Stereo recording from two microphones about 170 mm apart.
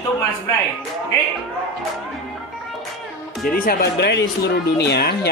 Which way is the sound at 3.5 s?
55° left (ahead or behind).